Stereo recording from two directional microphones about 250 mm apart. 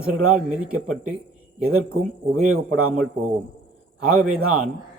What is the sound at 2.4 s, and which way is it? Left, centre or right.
Speech, right.